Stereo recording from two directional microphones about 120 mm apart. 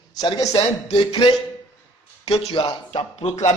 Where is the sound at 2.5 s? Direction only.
45° left (ahead or behind).